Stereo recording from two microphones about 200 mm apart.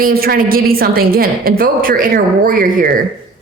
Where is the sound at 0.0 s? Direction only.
50° right (ahead or behind).